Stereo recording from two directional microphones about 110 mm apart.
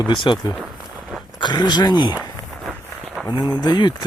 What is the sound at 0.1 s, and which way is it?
Speech, 45° left (ahead or behind).